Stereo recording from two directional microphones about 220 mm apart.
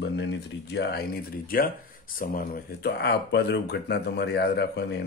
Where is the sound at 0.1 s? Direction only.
50° left (ahead or behind).